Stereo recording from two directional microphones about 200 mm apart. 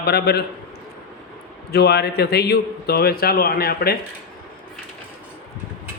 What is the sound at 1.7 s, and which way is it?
A man's voice, 55° left (ahead or behind).